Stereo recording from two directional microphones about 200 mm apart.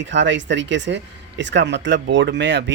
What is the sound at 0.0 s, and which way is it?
Speech, 65° right (ahead or behind).